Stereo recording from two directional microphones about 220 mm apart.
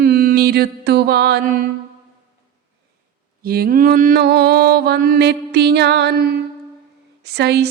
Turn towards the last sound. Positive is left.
turn(degrees=-50)  # may be behind; listen again after turning